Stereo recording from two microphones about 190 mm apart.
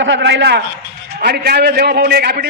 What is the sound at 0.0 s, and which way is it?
A man's voice, 65° right (ahead or behind).